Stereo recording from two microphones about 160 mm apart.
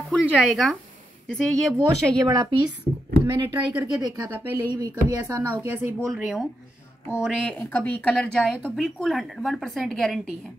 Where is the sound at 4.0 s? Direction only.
25° right (ahead or behind).